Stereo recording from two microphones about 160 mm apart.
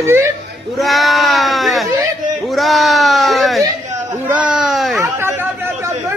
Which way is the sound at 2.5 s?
Centre (ahead or behind).